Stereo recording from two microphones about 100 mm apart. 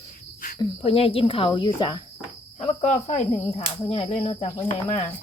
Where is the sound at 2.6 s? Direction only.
90° left.